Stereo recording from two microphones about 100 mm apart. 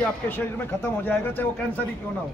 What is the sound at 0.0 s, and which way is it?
Speech, 20° left (ahead or behind).